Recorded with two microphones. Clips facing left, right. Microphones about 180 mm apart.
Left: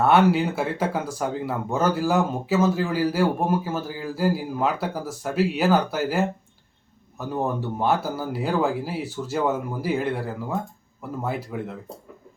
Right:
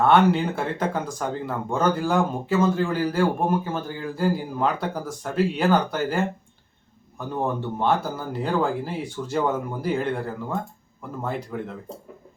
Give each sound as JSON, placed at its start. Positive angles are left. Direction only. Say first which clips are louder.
{"t": 0.0, "sound": "speech", "louder": "even", "side_deg": 5}